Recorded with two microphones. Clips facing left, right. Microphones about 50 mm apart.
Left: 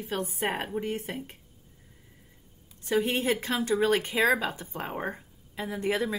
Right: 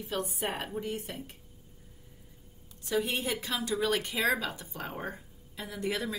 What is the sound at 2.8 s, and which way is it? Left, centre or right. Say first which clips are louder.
Speech: left 4 dB; left.